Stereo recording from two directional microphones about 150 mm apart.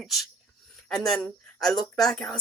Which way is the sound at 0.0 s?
Centre (ahead or behind).